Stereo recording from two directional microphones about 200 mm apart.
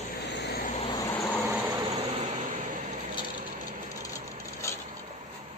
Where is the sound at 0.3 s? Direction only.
60° left (ahead or behind).